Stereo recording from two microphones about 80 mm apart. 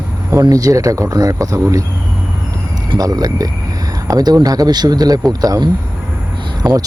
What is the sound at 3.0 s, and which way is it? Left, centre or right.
Speech, right.